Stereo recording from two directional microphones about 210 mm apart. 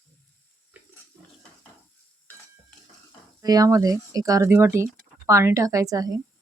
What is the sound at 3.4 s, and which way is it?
Speech, 15° right (ahead or behind).